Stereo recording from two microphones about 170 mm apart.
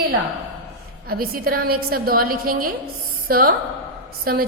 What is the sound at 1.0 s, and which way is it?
A woman's voice, 60° right (ahead or behind).